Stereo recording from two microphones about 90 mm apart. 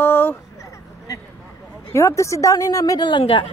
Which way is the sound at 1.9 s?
35° left (ahead or behind).